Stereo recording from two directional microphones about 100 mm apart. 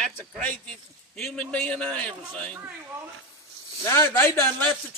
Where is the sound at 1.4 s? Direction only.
10° left (ahead or behind).